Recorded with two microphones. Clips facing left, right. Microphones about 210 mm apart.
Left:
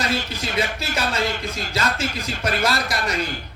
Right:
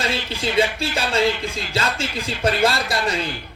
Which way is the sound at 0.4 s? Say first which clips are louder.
Right 9 dB; 30° right (ahead or behind).